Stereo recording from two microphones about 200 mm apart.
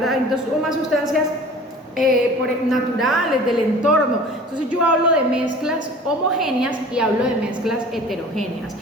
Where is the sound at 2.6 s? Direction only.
Centre (ahead or behind).